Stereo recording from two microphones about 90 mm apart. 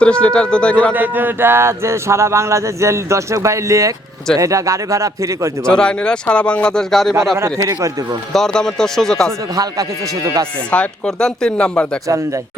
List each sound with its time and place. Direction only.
0.0 s speech: 10° left (ahead or behind)
0.9 s speech: 20° right (ahead or behind)
5.6 s speech: 10° left (ahead or behind)
8.3 s speech: 5° left (ahead or behind)
10.7 s speech: 10° left (ahead or behind)